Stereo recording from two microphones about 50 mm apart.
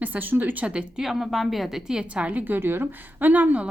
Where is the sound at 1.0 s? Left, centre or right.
Centre.